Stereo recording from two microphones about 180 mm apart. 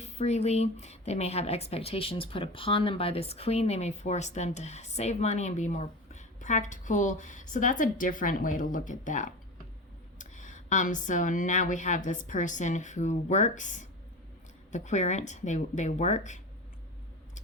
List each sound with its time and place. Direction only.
0.0 s a woman's voice: 35° left (ahead or behind)